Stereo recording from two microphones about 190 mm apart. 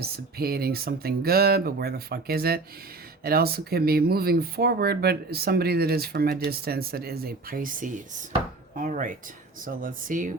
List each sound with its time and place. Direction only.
0.0 s speech: 55° right (ahead or behind)